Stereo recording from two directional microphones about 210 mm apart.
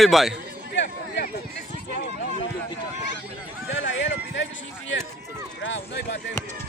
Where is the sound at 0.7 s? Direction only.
55° left (ahead or behind).